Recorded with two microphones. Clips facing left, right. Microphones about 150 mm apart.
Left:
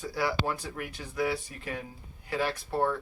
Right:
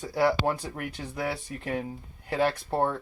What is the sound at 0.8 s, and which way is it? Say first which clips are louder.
Speech: left 1 dB; 55° right (ahead or behind).